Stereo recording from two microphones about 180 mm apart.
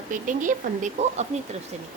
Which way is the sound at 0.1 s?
45° right (ahead or behind).